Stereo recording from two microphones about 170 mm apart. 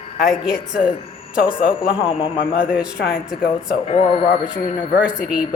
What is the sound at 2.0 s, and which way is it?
Speech, 30° left (ahead or behind).